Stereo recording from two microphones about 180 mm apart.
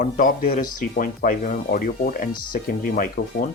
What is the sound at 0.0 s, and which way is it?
Speech, 50° left (ahead or behind).